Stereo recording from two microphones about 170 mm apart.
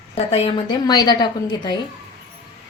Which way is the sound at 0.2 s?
35° left (ahead or behind).